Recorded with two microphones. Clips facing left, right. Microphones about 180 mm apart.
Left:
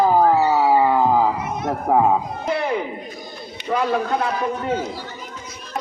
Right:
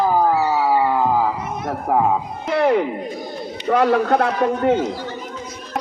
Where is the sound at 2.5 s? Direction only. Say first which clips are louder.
Right 6 dB; 80° right.